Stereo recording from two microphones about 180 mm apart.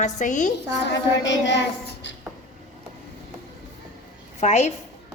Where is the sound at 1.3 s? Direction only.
75° left (ahead or behind).